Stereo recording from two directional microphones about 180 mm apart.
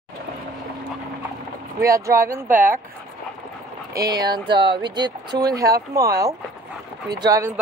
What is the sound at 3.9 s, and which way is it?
Speech, 20° right (ahead or behind).